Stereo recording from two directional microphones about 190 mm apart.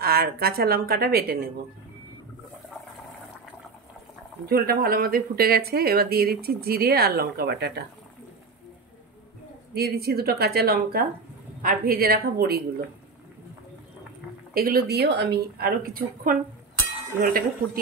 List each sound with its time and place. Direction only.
0.0 s speech: 55° right (ahead or behind)
4.5 s speech: 50° right (ahead or behind)
9.8 s speech: 55° right (ahead or behind)
14.5 s speech: 50° right (ahead or behind)